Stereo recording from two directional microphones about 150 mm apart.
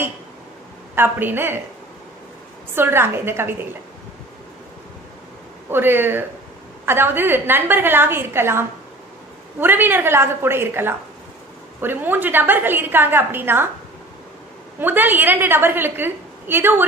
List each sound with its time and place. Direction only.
0.9 s a woman's voice: 15° right (ahead or behind)
2.7 s a woman's voice: 15° right (ahead or behind)
5.7 s a woman's voice: 15° right (ahead or behind)
14.8 s a woman's voice: 15° right (ahead or behind)